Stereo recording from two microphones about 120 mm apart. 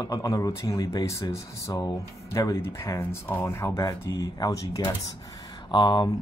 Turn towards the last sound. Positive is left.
turn(degrees=40)  # may be behind; listen again after turning